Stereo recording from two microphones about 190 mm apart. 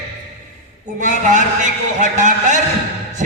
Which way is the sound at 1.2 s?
40° right (ahead or behind).